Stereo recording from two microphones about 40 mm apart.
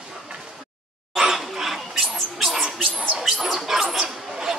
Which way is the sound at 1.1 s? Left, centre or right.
Centre.